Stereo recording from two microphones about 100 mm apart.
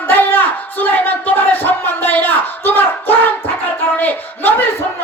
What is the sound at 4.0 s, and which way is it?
Speech, 15° left (ahead or behind).